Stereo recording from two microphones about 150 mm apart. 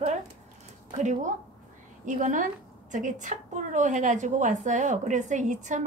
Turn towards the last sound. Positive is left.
turn(degrees=-55)  # may be behind; listen again after turning